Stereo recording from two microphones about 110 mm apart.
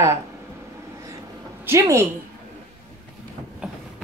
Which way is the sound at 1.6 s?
25° right (ahead or behind).